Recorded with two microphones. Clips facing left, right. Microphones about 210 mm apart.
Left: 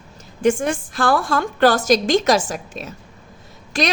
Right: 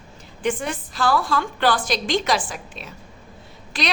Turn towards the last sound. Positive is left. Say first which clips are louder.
# left 5 dB
turn(degrees=45)  # may be behind; listen again after turning